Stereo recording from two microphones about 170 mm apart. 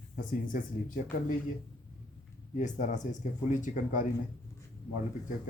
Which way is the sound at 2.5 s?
45° left (ahead or behind).